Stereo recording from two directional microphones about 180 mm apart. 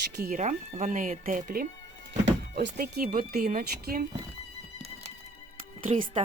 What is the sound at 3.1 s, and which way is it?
Speech, 50° right (ahead or behind).